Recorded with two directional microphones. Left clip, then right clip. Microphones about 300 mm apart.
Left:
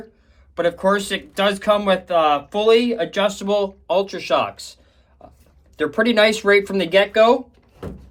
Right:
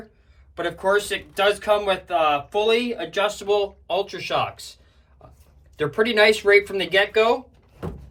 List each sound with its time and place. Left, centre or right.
0.5 s speech: left